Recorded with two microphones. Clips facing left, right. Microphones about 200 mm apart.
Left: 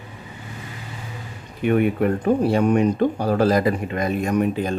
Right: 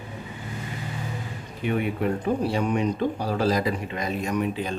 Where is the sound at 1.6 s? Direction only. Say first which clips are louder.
Left 6 dB; 55° left (ahead or behind).